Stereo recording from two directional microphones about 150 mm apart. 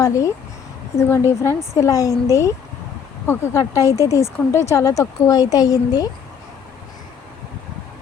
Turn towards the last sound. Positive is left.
turn(degrees=25)  # may be behind; listen again after turning